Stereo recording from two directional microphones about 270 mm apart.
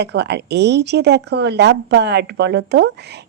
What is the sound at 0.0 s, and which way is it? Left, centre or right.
Speech, right.